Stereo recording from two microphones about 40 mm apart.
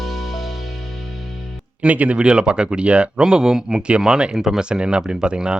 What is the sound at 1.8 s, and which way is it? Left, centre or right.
Speech, right.